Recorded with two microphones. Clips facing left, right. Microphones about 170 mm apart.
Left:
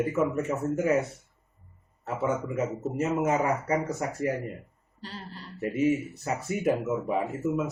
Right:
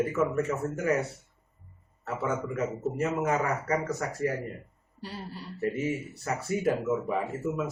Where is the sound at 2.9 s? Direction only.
20° left (ahead or behind).